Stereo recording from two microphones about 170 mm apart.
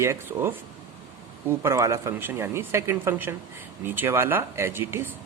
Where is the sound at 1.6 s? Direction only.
15° right (ahead or behind).